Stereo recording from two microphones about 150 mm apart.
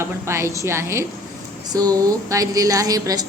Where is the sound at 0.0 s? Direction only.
20° right (ahead or behind).